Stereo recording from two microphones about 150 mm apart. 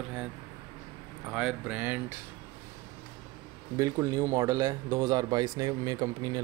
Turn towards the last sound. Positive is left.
turn(degrees=-25)  # may be behind; listen again after turning